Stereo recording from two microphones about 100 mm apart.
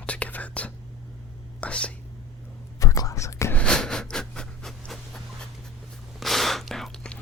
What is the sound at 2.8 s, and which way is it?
Whispering, 35° left (ahead or behind).